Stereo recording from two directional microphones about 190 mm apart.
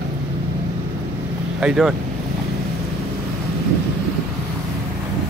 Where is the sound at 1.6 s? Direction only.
Centre (ahead or behind).